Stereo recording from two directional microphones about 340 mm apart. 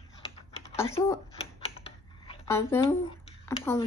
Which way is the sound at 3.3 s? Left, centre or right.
Centre.